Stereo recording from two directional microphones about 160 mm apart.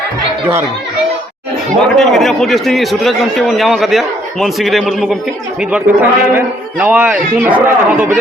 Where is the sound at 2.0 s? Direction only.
Centre (ahead or behind).